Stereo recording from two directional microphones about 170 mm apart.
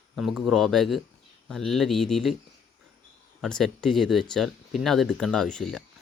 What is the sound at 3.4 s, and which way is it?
Speech, centre (ahead or behind).